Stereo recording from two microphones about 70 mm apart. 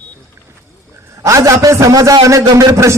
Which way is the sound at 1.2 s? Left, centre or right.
Right.